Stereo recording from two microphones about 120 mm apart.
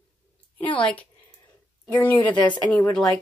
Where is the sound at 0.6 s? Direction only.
45° left (ahead or behind).